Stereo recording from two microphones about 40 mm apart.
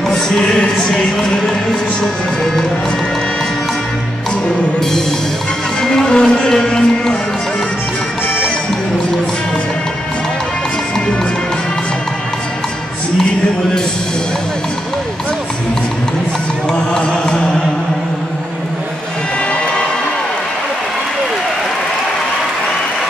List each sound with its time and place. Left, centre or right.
0.1 s a sound: centre
5.8 s music: centre
17.0 s music: left